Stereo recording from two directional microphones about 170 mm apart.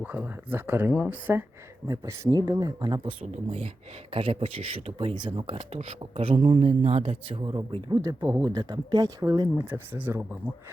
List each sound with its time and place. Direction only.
0.0 s speech: 10° right (ahead or behind)